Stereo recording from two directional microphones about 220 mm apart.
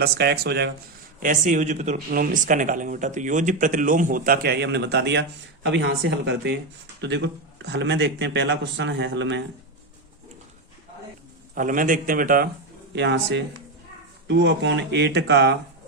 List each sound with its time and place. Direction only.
0.0 s a man's voice: 45° right (ahead or behind)
1.2 s a man's voice: 35° right (ahead or behind); by 9.4 s 55° right (ahead or behind)
11.5 s speech: 35° right (ahead or behind)
12.9 s a man's voice: 55° right (ahead or behind)